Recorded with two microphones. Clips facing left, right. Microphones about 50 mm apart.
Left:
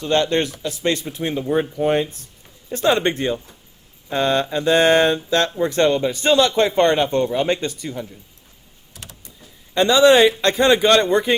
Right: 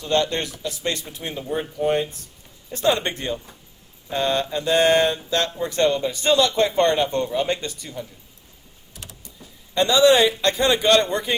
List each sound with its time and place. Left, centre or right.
0.1 s a man's voice: left
2.7 s a man's voice: left
10.0 s a man's voice: left